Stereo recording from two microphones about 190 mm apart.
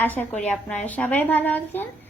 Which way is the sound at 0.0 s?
10° left (ahead or behind).